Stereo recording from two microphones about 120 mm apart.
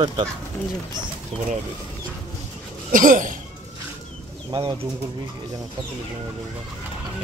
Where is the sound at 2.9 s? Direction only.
90° right.